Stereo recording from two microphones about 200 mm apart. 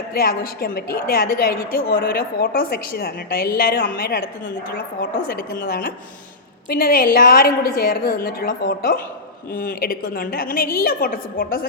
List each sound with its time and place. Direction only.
0.1 s a woman's voice: 50° left (ahead or behind)